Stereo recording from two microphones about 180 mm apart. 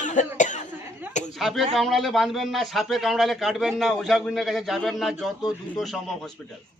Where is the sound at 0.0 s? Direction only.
45° left (ahead or behind).